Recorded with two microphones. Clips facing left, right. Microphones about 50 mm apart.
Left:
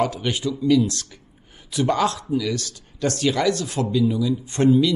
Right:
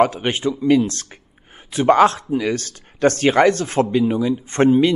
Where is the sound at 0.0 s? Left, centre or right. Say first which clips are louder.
Right 6 dB; right.